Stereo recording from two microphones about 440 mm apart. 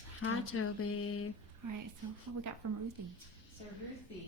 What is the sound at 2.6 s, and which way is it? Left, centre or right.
Speech, right.